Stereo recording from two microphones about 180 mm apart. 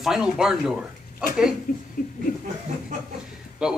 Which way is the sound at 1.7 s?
50° left (ahead or behind).